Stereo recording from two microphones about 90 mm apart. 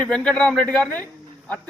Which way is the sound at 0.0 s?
10° left (ahead or behind).